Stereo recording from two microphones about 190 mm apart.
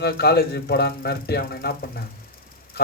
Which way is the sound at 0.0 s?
55° left (ahead or behind).